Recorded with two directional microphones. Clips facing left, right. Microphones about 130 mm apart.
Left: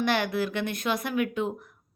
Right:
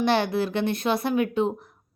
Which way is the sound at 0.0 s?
30° right (ahead or behind).